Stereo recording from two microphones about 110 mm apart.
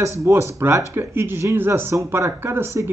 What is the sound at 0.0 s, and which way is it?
Speech, 25° right (ahead or behind).